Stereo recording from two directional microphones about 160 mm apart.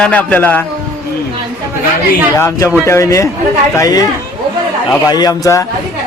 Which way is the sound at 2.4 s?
15° left (ahead or behind).